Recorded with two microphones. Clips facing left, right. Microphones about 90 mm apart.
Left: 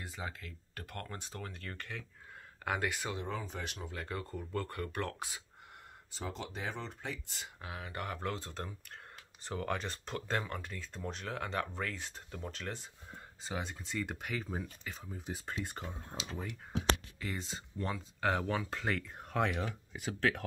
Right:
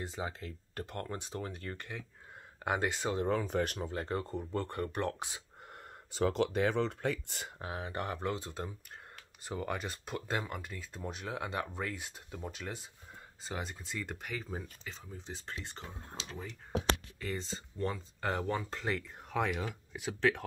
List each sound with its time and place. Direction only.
0.0 s speech: 25° right (ahead or behind)
3.2 s speech: 50° right (ahead or behind)
3.8 s speech: 35° right (ahead or behind)
6.1 s speech: 70° right (ahead or behind); by 7.5 s 55° right (ahead or behind)
7.5 s speech: 30° right (ahead or behind); by 20.4 s centre (ahead or behind)